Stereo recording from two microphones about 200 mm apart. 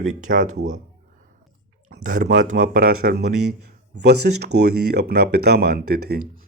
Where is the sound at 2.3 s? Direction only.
45° right (ahead or behind).